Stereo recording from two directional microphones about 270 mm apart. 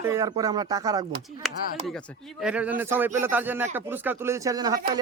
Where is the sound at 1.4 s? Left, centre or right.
Centre.